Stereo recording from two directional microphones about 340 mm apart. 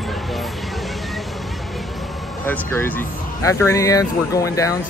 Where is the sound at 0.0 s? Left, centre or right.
Centre.